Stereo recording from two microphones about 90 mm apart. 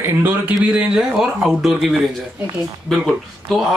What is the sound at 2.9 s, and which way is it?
Speech, centre (ahead or behind).